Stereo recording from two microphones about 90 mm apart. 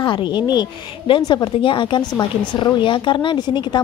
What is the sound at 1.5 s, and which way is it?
Speech, 70° left (ahead or behind).